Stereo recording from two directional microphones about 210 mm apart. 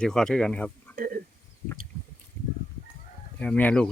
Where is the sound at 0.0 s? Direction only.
5° left (ahead or behind).